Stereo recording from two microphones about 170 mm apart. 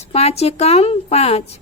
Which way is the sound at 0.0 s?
40° left (ahead or behind).